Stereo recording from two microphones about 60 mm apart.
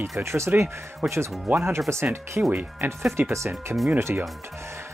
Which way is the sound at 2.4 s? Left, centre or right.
Right.